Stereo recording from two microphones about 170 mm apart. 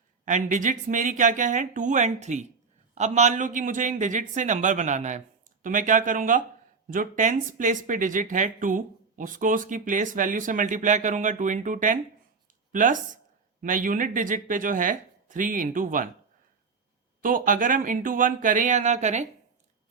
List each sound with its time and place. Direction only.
0.3 s speech: 50° right (ahead or behind)
17.2 s speech: 55° right (ahead or behind)